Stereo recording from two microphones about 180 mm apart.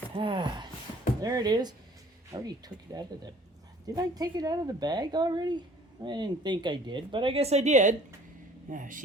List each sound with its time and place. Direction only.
0.2 s speech: 25° right (ahead or behind); by 9.0 s 45° right (ahead or behind)